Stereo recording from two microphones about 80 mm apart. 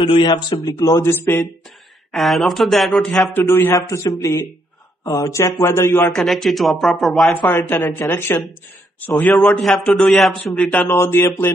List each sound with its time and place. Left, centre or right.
0.0 s a man's voice: left
0.7 s speech: left
1.0 s a man's voice: left
2.1 s speech: centre
3.3 s speech: left
3.7 s a man's voice: left
6.1 s speech: centre
7.9 s speech: left
9.2 s a man's voice: centre
9.6 s speech: centre
10.5 s a man's voice: centre
10.9 s speech: left